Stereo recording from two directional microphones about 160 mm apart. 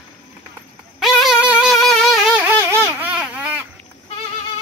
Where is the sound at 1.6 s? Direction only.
Centre (ahead or behind).